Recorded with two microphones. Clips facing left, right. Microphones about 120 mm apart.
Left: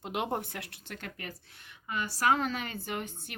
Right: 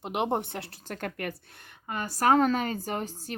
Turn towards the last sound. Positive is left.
turn(degrees=-35)  # may be behind; listen again after turning